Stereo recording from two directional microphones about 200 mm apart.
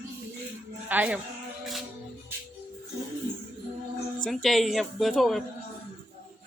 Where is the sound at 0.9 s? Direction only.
10° right (ahead or behind).